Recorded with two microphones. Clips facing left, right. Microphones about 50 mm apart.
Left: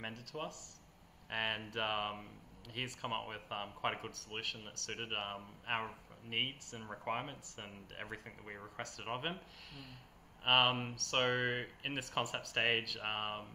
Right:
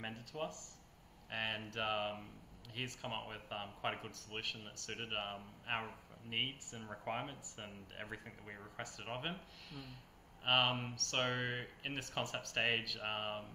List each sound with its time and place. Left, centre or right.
0.1 s speech: centre
1.3 s speech: centre
9.7 s a sound: centre
10.4 s speech: centre
13.0 s speech: centre